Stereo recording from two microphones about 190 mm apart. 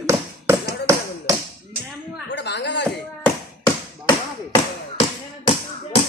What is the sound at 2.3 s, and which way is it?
Speech, 65° left (ahead or behind).